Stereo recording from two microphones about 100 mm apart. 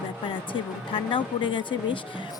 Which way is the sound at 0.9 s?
55° left (ahead or behind).